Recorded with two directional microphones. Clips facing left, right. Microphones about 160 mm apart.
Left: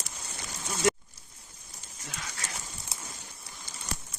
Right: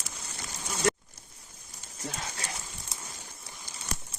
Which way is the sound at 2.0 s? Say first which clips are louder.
Right 5 dB; 35° right (ahead or behind).